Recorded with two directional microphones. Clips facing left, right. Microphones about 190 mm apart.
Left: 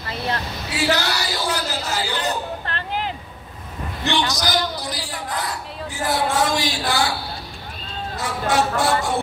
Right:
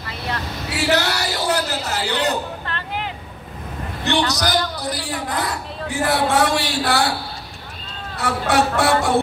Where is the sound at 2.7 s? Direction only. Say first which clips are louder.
Left 1 dB; 40° left (ahead or behind).